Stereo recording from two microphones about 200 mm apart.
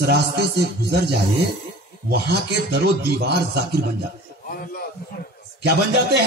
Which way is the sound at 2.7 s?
55° right (ahead or behind).